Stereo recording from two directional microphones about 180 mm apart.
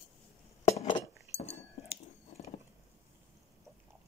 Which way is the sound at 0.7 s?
25° left (ahead or behind).